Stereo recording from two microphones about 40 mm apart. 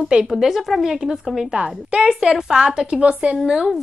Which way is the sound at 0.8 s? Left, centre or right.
Centre.